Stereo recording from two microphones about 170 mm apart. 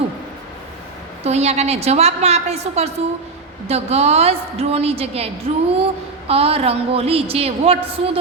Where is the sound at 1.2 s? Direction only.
40° right (ahead or behind).